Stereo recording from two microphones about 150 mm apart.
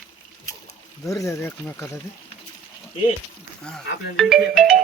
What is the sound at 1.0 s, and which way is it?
Speech, 20° left (ahead or behind).